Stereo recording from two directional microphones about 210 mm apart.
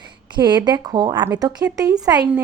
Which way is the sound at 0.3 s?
20° right (ahead or behind).